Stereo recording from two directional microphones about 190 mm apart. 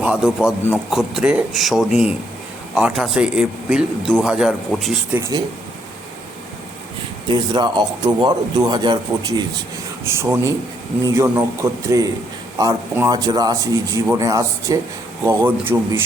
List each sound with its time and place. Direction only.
0.0 s speech: 5° right (ahead or behind)
5.1 s a man's voice: 15° right (ahead or behind)
7.3 s a man's voice: 25° right (ahead or behind)